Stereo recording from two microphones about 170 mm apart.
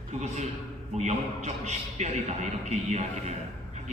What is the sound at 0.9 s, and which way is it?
A man's voice, 45° right (ahead or behind).